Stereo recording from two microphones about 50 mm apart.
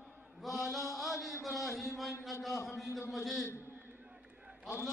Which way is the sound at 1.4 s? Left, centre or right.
Centre.